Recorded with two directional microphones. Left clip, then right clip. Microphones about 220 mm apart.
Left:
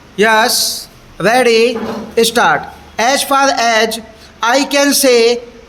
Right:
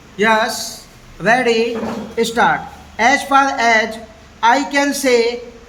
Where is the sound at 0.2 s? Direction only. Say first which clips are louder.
Left 5 dB; 45° left (ahead or behind).